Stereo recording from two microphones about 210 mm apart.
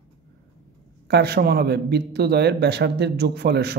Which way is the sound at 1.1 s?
50° right (ahead or behind).